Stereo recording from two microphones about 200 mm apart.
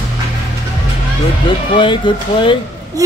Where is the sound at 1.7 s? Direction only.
25° left (ahead or behind).